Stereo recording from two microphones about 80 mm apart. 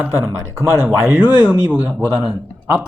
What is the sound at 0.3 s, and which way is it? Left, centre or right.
Speech, right.